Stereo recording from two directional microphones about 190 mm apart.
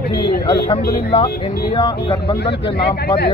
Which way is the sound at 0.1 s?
20° left (ahead or behind).